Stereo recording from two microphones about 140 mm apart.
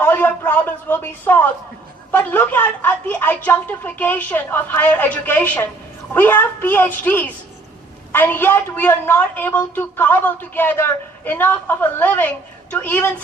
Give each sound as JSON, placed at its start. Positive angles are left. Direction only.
{"t": 0.0, "sound": "a woman's voice", "side_deg": 15}